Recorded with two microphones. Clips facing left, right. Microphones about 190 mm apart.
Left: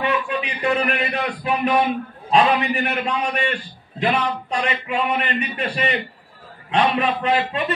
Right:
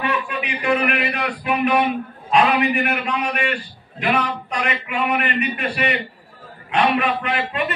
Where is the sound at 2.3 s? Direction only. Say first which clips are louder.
Even; 30° left (ahead or behind).